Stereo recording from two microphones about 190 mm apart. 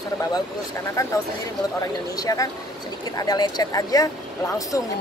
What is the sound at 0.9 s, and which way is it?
Speech, 15° left (ahead or behind).